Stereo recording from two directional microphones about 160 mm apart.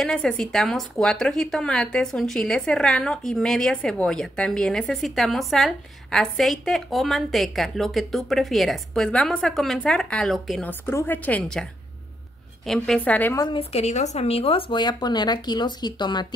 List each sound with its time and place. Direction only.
0.0 s a woman's voice: 5° left (ahead or behind)
10.7 s a woman's voice: 15° left (ahead or behind)
12.6 s a woman's voice: centre (ahead or behind)
13.4 s speech: 35° left (ahead or behind)